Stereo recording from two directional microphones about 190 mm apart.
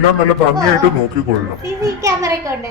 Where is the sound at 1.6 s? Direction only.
15° right (ahead or behind).